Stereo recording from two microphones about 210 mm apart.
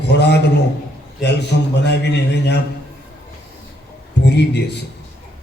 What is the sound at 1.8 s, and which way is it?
Speech, 50° left (ahead or behind).